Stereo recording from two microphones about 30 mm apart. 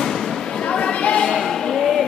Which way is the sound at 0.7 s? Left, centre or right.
Left.